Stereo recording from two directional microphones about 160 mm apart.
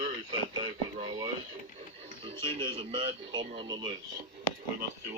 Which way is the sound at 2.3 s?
35° right (ahead or behind).